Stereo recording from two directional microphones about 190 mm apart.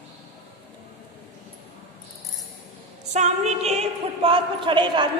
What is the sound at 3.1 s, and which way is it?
A woman's voice, 35° right (ahead or behind).